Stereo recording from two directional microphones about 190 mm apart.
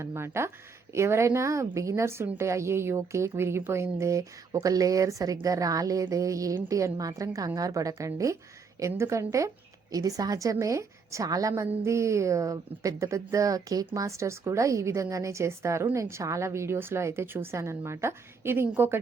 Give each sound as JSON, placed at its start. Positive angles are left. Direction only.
{"t": 0.0, "sound": "a woman's voice", "side_deg": -15}